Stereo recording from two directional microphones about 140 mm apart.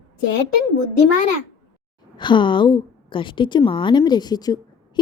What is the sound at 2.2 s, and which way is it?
A woman's voice, 35° left (ahead or behind).